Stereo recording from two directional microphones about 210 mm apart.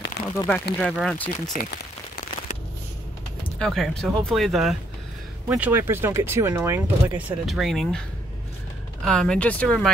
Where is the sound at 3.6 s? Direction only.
Centre (ahead or behind).